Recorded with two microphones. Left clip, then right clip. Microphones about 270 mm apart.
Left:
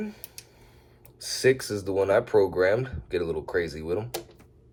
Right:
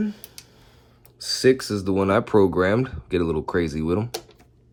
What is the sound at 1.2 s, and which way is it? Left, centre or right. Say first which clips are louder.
Speech: right 4 dB; right.